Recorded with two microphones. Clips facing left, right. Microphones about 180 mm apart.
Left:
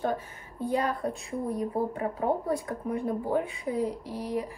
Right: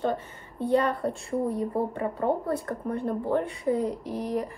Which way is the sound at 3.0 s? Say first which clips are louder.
Right 2 dB; 65° right (ahead or behind).